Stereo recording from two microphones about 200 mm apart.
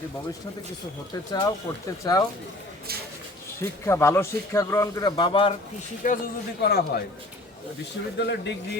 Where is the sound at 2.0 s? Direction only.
15° left (ahead or behind).